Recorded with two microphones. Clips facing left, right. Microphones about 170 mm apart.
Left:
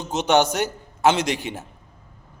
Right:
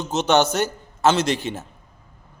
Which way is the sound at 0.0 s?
10° left (ahead or behind).